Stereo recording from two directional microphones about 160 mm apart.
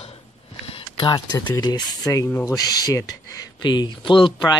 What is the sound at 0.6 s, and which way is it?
Speech, 35° left (ahead or behind).